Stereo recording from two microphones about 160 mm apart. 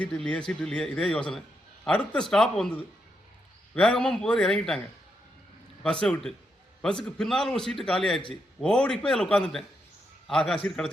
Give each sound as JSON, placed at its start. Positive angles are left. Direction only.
{"t": 0.0, "sound": "a man's voice", "side_deg": 5}
{"t": 3.8, "sound": "a man's voice", "side_deg": 5}
{"t": 5.8, "sound": "a man's voice", "side_deg": 5}